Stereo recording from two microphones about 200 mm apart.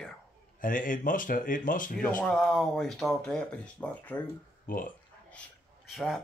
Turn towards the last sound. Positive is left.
turn(degrees=0)  # may be behind; listen again after turning